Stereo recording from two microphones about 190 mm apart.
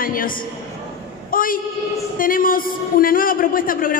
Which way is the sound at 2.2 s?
45° left (ahead or behind).